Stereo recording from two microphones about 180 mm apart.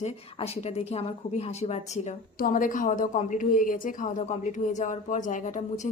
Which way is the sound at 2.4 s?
50° left (ahead or behind).